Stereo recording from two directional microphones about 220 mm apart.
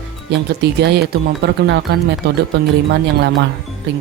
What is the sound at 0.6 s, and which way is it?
Speech, 50° right (ahead or behind).